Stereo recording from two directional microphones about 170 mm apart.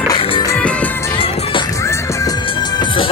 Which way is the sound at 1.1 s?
35° left (ahead or behind).